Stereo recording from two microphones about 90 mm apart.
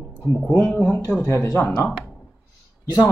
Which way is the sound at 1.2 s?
35° left (ahead or behind).